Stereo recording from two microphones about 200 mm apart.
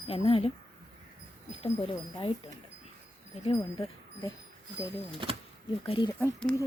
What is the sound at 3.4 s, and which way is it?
Speech, 30° left (ahead or behind).